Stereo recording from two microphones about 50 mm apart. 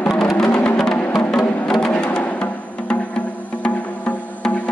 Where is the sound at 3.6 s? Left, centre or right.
Left.